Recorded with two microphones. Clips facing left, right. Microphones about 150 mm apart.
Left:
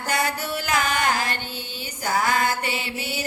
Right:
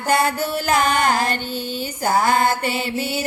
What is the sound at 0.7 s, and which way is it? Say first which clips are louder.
Music: right 5 dB; 35° right (ahead or behind).